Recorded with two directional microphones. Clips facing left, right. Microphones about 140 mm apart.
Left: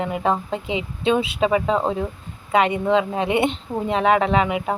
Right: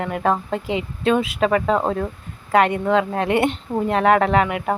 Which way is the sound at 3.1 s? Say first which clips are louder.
Right 1 dB; 20° left (ahead or behind).